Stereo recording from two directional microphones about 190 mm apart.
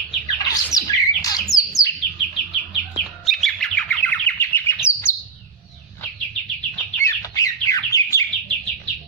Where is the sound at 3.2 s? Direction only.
Centre (ahead or behind).